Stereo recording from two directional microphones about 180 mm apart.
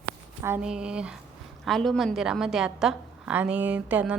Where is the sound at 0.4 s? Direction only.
10° right (ahead or behind).